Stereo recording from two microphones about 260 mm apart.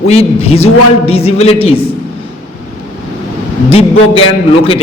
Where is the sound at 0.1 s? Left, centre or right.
Left.